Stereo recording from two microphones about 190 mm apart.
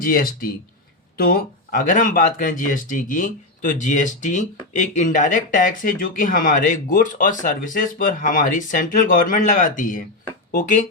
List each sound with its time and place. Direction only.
0.0 s speech: 50° left (ahead or behind)